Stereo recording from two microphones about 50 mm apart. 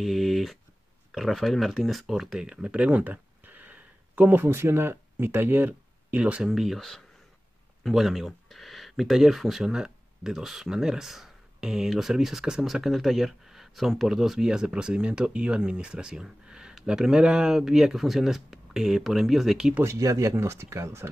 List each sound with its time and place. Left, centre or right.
0.0 s speech: centre
2.4 s a sound: right
4.4 s speech: right
6.1 s speech: right
6.5 s speech: centre
7.8 s speech: centre
19.8 s speech: right